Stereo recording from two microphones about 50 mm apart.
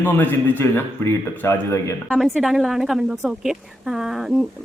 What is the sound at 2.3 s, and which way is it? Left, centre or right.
A woman's voice, centre.